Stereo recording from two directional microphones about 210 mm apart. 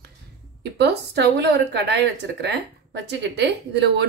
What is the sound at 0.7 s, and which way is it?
A woman's voice, 55° right (ahead or behind).